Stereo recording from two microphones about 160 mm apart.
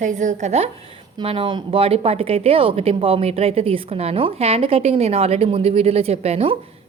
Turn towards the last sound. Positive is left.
turn(degrees=-40)  # may be behind; listen again after turning